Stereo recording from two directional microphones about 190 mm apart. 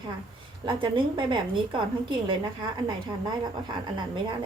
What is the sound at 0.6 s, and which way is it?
A woman's voice, 25° right (ahead or behind).